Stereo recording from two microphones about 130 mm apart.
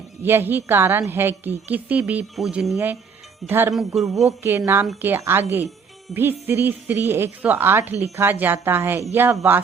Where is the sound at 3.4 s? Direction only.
15° right (ahead or behind).